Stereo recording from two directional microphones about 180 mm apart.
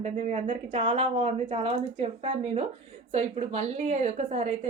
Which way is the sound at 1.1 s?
40° right (ahead or behind).